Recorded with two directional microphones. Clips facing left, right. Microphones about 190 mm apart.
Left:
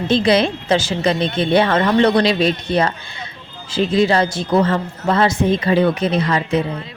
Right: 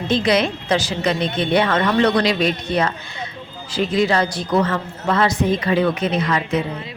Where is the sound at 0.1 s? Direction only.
30° left (ahead or behind).